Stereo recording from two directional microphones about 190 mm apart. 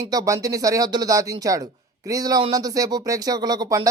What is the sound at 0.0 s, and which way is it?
Speech, 15° right (ahead or behind).